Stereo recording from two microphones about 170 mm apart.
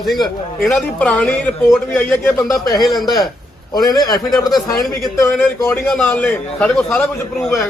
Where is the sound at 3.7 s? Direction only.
25° left (ahead or behind).